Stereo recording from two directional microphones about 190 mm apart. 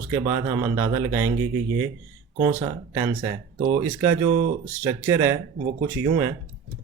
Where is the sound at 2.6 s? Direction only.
15° right (ahead or behind).